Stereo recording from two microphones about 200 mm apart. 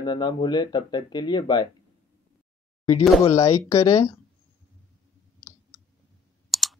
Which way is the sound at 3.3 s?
15° left (ahead or behind).